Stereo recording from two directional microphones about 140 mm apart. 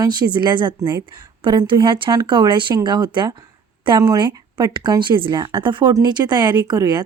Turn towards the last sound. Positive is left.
turn(degrees=-30)  # may be behind; listen again after turning